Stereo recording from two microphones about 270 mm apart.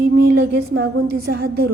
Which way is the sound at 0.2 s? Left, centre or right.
Right.